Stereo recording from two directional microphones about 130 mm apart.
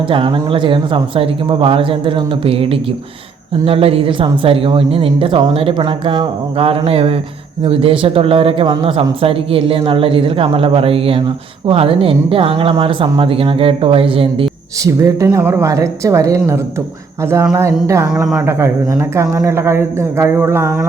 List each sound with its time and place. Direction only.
0.1 s a woman's voice: 45° right (ahead or behind)
14.8 s speech: 25° right (ahead or behind)